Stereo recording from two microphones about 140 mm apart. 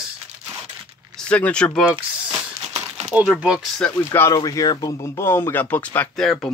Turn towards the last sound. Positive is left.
turn(degrees=10)  # may be behind; listen again after turning